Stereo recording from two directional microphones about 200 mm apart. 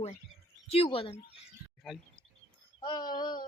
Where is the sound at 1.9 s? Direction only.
Centre (ahead or behind).